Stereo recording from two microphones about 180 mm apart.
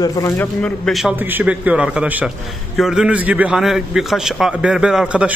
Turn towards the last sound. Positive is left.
turn(degrees=-5)  # may be behind; listen again after turning